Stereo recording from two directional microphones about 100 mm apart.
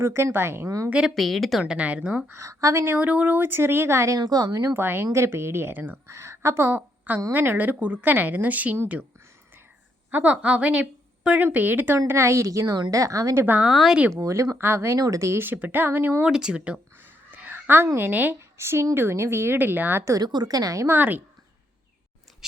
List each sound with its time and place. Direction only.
0.0 s a woman's voice: 25° right (ahead or behind)
0.9 s speech: 10° right (ahead or behind)
1.1 s speech: centre (ahead or behind)
2.3 s a woman's voice: 30° right (ahead or behind)
4.2 s speech: 45° right (ahead or behind)
4.7 s a woman's voice: 20° right (ahead or behind)
10.1 s a woman's voice: 15° right (ahead or behind); by 13.4 s 35° right (ahead or behind)
13.4 s a woman's voice: 20° right (ahead or behind)
13.7 s speech: 5° right (ahead or behind)
14.2 s a woman's voice: 30° right (ahead or behind)
16.3 s a woman's voice: 10° right (ahead or behind); by 20.1 s 25° right (ahead or behind)
20.1 s a woman's voice: 45° right (ahead or behind)
20.8 s a woman's voice: 20° right (ahead or behind)